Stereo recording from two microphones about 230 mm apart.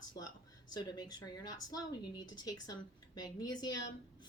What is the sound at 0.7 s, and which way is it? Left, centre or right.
A woman's voice, centre.